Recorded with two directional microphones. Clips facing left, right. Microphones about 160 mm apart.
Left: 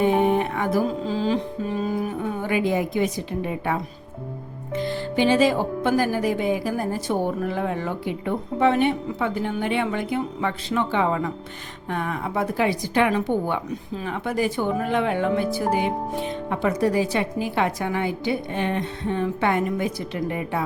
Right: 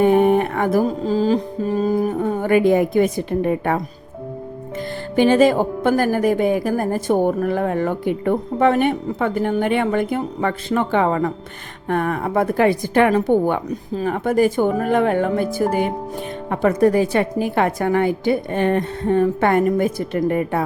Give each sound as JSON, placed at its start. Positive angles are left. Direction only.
{"t": 0.0, "sound": "music", "side_deg": -50}
{"t": 4.8, "sound": "speech", "side_deg": -50}